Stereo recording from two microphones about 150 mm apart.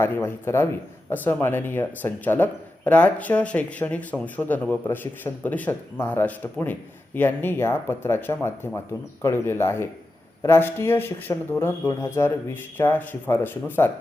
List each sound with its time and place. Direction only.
0.0 s speech: 15° left (ahead or behind)